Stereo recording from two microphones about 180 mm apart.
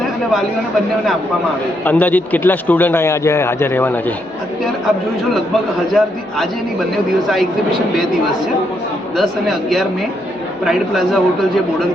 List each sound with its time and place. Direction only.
1.8 s a man's voice: 10° left (ahead or behind)
5.9 s speech: centre (ahead or behind)
9.1 s speech: centre (ahead or behind)